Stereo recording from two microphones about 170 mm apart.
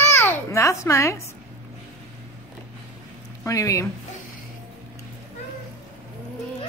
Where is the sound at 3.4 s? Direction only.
20° left (ahead or behind).